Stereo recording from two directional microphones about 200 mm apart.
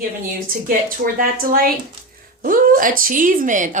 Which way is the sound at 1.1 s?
45° right (ahead or behind).